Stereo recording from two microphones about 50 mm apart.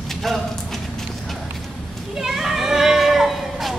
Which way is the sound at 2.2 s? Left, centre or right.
Centre.